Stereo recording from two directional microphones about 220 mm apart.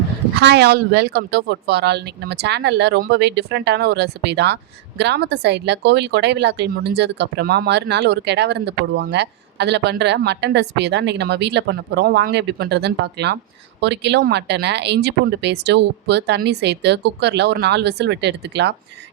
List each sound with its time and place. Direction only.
0.3 s a woman's voice: 50° right (ahead or behind)